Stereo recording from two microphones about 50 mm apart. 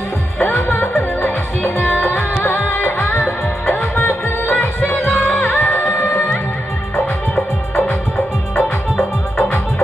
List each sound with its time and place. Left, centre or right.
1.9 s music: left
3.9 s music: left
5.6 s music: left
8.5 s music: centre